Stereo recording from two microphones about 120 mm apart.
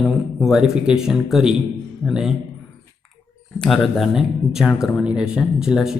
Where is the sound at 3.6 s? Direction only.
5° left (ahead or behind).